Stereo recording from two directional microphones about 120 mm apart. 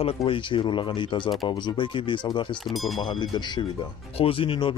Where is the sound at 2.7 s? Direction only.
Centre (ahead or behind).